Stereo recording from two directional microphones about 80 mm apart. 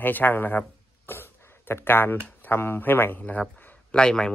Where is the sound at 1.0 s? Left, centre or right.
Left.